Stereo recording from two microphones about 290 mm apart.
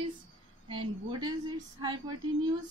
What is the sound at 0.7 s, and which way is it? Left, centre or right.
A woman's voice, centre.